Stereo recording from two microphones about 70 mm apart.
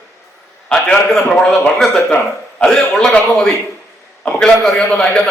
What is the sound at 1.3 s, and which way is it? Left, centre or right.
Speech, centre.